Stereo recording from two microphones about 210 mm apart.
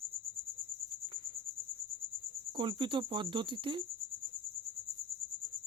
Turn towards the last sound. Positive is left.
turn(degrees=-25)  # may be behind; listen again after turning